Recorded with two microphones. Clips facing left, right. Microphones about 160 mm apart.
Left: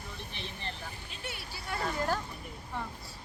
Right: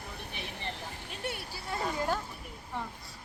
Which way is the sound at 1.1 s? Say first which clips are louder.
Right 8 dB; 55° right (ahead or behind).